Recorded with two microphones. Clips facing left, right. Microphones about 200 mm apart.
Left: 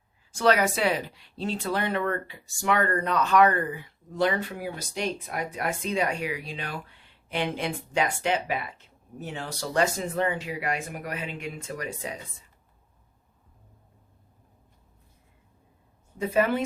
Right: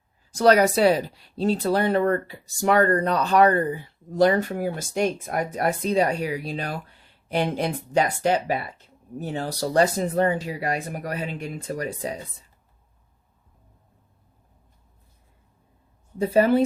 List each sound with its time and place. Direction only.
0.3 s speech: 40° right (ahead or behind)
16.1 s speech: 35° right (ahead or behind)